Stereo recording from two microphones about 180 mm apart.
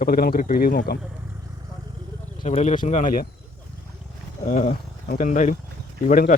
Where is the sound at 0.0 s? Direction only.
55° left (ahead or behind).